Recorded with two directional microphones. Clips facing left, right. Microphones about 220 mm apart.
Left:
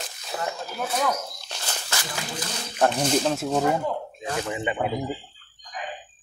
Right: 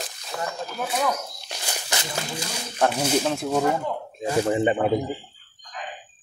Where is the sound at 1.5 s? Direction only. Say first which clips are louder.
Right 3 dB; 15° right (ahead or behind).